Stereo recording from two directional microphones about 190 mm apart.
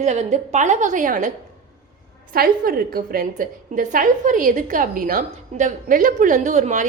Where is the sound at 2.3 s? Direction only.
50° right (ahead or behind).